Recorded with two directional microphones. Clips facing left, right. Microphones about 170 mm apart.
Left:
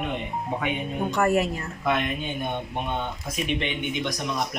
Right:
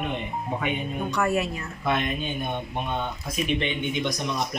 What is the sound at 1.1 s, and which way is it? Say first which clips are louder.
Speech: left 3 dB; 45° left (ahead or behind).